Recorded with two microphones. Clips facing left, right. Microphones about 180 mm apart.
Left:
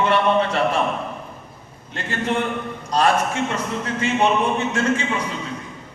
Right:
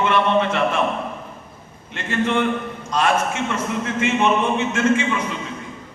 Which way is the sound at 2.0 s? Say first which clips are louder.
Right 2 dB; 35° left (ahead or behind).